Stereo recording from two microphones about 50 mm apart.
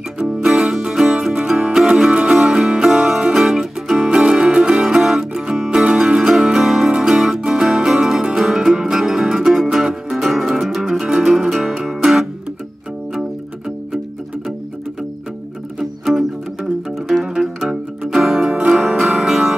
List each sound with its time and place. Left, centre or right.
0.2 s music: centre
4.1 s music: centre
15.8 s music: centre
17.3 s music: centre
18.9 s music: centre